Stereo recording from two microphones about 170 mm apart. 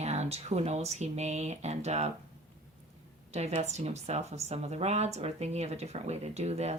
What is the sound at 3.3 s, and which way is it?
Speech, 40° right (ahead or behind).